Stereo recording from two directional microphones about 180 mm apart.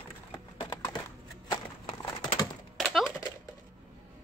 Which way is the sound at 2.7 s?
Centre (ahead or behind).